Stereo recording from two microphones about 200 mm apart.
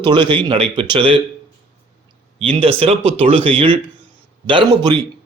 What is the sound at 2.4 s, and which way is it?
Speech, 30° right (ahead or behind).